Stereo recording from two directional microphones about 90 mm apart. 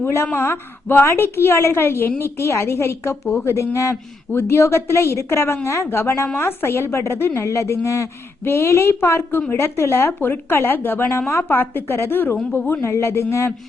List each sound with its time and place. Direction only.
0.0 s a woman's voice: 30° left (ahead or behind)